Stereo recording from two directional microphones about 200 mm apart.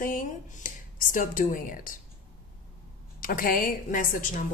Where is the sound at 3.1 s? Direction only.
45° left (ahead or behind).